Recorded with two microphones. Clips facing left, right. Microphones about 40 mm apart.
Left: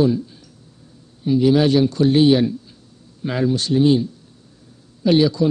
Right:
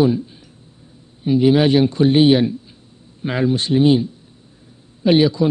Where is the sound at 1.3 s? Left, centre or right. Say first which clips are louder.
Right 1 dB; right.